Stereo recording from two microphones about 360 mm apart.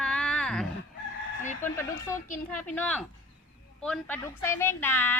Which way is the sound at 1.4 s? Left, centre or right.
Centre.